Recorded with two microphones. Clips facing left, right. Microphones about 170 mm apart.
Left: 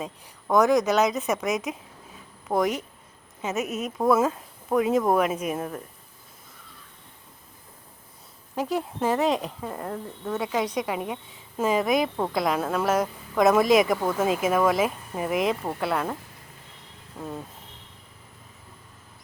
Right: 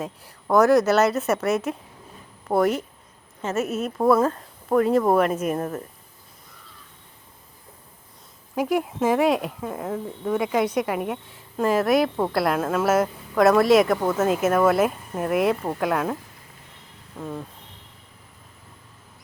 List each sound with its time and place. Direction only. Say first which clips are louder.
0.0 s a woman's voice: right 3 dB; 5° right (ahead or behind)
8.5 s a woman's voice: right 4 dB; 10° right (ahead or behind)
17.2 s a woman's voice: right 2 dB; 5° left (ahead or behind)